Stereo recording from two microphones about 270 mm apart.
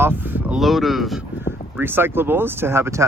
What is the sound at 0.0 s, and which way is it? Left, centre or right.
Speech, centre.